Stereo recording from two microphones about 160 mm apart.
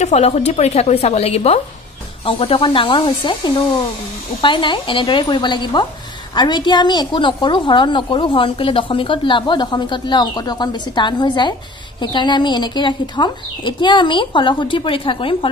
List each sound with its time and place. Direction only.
0.0 s a woman's voice: 45° left (ahead or behind)